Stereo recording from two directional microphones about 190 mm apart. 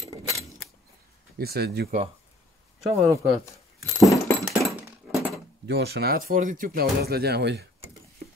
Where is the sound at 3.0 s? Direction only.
15° right (ahead or behind).